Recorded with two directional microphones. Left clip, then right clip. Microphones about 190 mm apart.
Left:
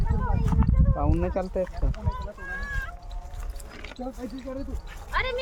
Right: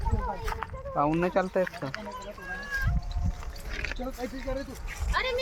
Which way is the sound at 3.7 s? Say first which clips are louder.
Right 8 dB; 10° right (ahead or behind).